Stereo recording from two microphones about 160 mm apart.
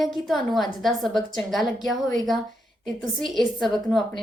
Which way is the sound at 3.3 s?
Centre (ahead or behind).